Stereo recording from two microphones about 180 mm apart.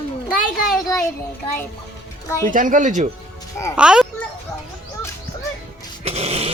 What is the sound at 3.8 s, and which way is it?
Speech, 5° right (ahead or behind).